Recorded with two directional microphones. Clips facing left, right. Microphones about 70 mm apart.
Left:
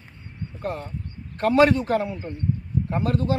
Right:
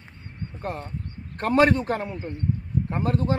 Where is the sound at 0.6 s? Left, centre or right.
Right.